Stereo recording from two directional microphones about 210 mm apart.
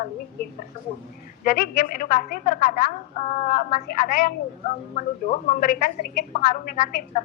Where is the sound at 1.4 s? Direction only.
45° left (ahead or behind).